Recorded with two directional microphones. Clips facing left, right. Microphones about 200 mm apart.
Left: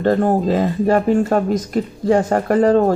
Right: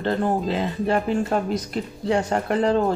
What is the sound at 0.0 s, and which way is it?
Speech, 50° left (ahead or behind).